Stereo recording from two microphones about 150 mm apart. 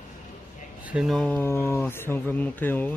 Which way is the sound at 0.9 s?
5° right (ahead or behind).